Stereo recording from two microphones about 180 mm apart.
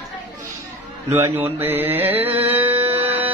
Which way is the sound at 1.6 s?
10° right (ahead or behind).